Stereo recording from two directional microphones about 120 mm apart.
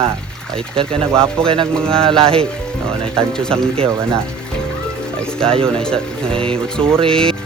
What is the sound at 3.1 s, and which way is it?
Speech, 5° left (ahead or behind).